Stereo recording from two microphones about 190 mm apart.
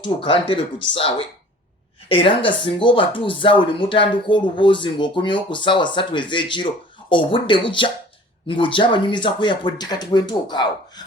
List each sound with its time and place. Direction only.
0.2 s speech: 25° left (ahead or behind)